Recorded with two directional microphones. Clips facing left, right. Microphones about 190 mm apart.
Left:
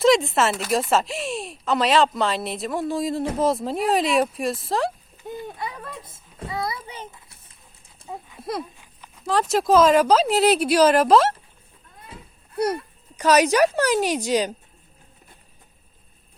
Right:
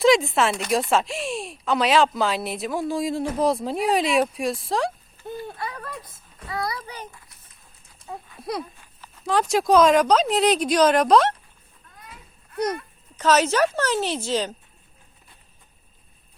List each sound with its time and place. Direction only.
0.0 s speech: centre (ahead or behind)
5.1 s a sound: 15° left (ahead or behind)
6.8 s a child's voice: 25° left (ahead or behind)
8.0 s goat: 30° left (ahead or behind)
8.4 s speech: centre (ahead or behind)
12.5 s speech: 10° left (ahead or behind)